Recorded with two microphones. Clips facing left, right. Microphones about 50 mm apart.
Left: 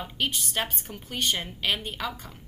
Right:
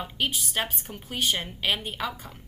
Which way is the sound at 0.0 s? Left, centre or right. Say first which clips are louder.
Right 1 dB; centre.